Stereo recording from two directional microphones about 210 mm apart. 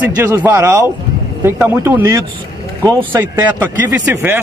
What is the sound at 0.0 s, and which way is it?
Speech, 10° right (ahead or behind).